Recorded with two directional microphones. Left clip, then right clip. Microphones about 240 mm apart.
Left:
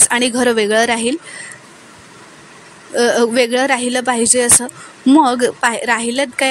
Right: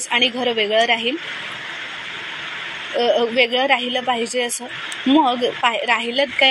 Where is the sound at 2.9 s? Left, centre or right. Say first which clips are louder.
Left 4 dB; left.